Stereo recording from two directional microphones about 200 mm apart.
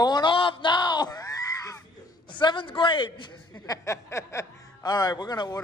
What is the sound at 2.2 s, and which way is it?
A man's voice, 25° left (ahead or behind).